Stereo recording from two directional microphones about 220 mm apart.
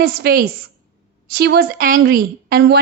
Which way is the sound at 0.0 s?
45° right (ahead or behind).